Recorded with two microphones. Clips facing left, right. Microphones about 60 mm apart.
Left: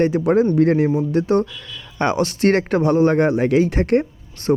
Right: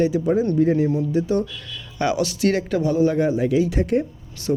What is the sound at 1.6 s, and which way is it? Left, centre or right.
Speech, left.